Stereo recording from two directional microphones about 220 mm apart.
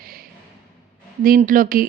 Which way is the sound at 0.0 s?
40° right (ahead or behind).